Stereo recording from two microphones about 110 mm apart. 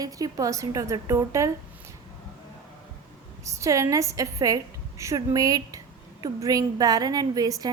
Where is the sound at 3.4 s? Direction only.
30° right (ahead or behind).